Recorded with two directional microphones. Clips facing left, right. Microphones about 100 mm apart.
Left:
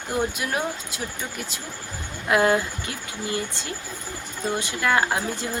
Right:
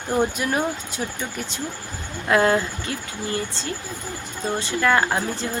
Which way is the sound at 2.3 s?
10° left (ahead or behind).